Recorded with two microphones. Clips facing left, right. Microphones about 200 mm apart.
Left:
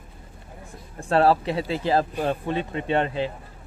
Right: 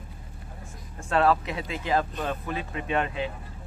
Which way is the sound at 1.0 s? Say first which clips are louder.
Left 4 dB; 35° left (ahead or behind).